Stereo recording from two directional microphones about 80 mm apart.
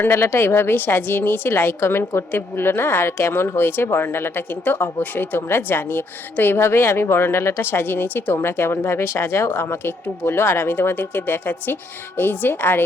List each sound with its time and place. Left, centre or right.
0.0 s speech: left